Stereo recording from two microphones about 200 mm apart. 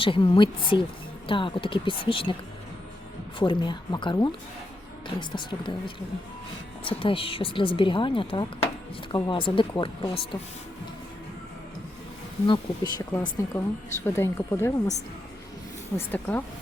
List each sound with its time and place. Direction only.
0.0 s speech: 25° left (ahead or behind)
3.3 s speech: 25° left (ahead or behind)
7.0 s speech: 25° left (ahead or behind)
12.5 s a woman's voice: 20° left (ahead or behind)
16.0 s a woman's voice: 10° left (ahead or behind)